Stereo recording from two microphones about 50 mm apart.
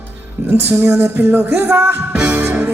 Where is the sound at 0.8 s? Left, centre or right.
Right.